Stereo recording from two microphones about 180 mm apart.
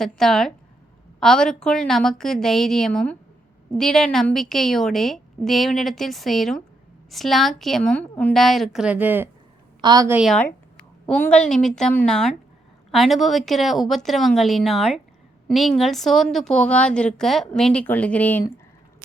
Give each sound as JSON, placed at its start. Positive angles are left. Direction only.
{"t": 0.0, "sound": "a woman's voice", "side_deg": 0}
{"t": 9.8, "sound": "a woman's voice", "side_deg": -20}
{"t": 10.1, "sound": "a woman's voice", "side_deg": -5}
{"t": 11.0, "sound": "a woman's voice", "side_deg": 10}